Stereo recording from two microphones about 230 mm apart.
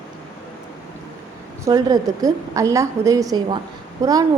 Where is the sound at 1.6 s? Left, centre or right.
Centre.